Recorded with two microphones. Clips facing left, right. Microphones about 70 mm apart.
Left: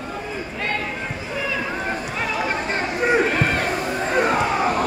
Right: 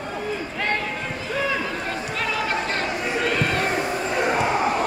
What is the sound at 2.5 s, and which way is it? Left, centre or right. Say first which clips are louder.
Chatter: left 1 dB; left.